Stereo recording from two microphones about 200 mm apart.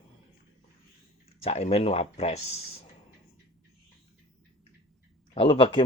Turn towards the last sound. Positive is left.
turn(degrees=25)  # may be behind; listen again after turning